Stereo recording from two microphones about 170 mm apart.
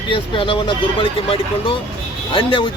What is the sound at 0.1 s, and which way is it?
Speech, 30° left (ahead or behind).